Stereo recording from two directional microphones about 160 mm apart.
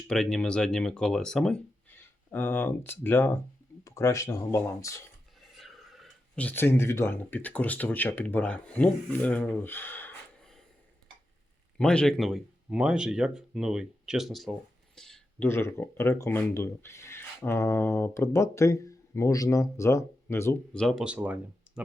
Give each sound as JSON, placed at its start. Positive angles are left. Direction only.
{"t": 0.1, "sound": "speech", "side_deg": 5}
{"t": 5.4, "sound": "speech", "side_deg": 0}
{"t": 11.8, "sound": "speech", "side_deg": 5}
{"t": 14.9, "sound": "a sound", "side_deg": 5}
{"t": 15.4, "sound": "speech", "side_deg": 15}
{"t": 20.7, "sound": "speech", "side_deg": 0}